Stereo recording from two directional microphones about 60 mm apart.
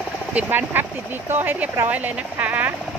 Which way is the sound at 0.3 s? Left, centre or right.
Right.